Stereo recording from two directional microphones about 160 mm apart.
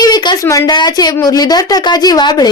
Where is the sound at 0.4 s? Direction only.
20° left (ahead or behind).